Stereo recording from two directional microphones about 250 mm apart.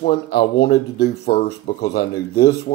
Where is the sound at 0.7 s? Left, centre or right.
Left.